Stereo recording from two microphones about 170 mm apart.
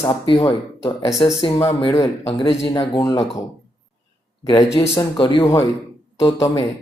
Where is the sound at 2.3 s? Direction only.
35° left (ahead or behind).